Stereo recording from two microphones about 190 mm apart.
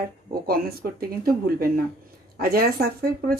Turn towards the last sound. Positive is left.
turn(degrees=-55)  # may be behind; listen again after turning